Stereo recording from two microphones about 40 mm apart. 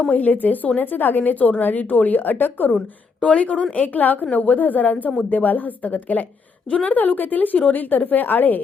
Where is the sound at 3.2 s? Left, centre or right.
Left.